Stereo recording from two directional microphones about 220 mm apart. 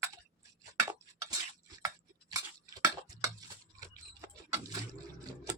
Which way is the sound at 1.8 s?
15° right (ahead or behind).